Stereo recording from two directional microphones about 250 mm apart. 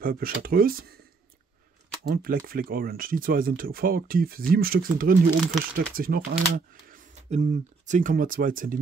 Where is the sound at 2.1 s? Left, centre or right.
Right.